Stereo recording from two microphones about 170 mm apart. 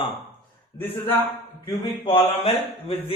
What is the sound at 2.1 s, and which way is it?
Speech, 35° left (ahead or behind).